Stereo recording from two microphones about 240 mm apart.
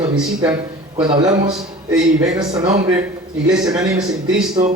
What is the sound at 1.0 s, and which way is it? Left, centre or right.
Speech, centre.